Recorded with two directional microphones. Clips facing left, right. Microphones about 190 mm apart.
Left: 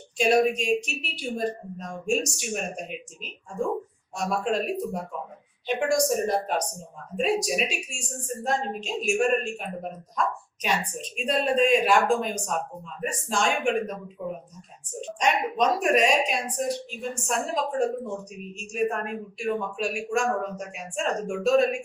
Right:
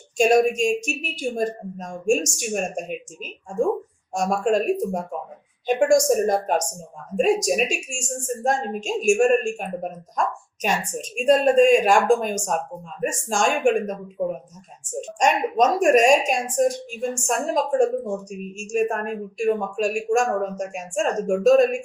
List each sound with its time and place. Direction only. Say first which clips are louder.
0.2 s a woman's voice: right 4 dB; 45° right (ahead or behind)